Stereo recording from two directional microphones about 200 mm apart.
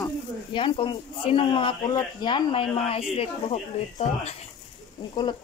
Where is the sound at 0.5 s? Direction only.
25° left (ahead or behind).